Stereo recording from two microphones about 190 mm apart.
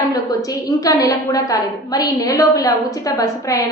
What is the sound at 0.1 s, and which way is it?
A woman's voice, 20° left (ahead or behind).